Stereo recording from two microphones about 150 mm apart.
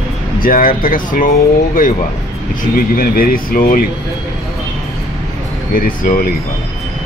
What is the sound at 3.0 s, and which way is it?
Speech, 75° left (ahead or behind).